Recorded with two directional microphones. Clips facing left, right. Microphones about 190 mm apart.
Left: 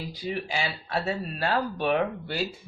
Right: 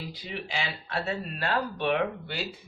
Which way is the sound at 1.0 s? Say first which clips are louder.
Left 2 dB; 40° left (ahead or behind).